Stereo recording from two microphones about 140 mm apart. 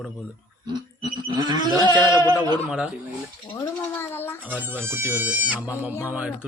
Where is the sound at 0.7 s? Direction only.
30° right (ahead or behind).